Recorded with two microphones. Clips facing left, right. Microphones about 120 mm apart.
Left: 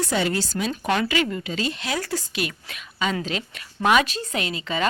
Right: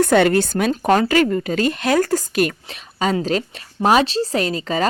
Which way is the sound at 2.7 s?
35° right (ahead or behind).